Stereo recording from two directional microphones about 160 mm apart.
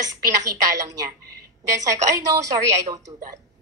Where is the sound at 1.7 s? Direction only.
20° right (ahead or behind).